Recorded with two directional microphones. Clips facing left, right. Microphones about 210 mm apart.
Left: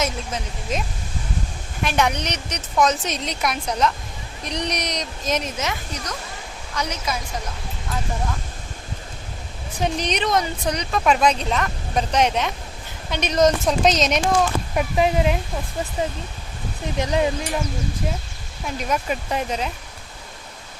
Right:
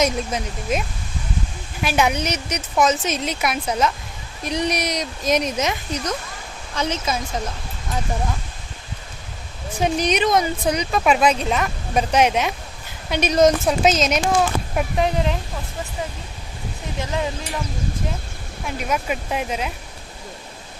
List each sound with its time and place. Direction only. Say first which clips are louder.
0.0 s speech: right 5 dB; 10° right (ahead or behind)
1.8 s a woman's voice: right 2 dB; 5° right (ahead or behind); by 7.2 s 25° right (ahead or behind)
9.8 s speech: right 4 dB; 10° right (ahead or behind); by 15.4 s 10° left (ahead or behind)
17.0 s speech: left 4 dB; 20° left (ahead or behind)
18.8 s speech: even; 5° right (ahead or behind)